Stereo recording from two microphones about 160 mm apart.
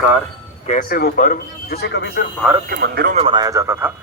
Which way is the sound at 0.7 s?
65° left (ahead or behind).